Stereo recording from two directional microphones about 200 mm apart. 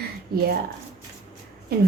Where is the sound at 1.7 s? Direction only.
50° right (ahead or behind).